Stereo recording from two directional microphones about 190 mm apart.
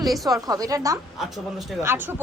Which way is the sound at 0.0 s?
Centre (ahead or behind).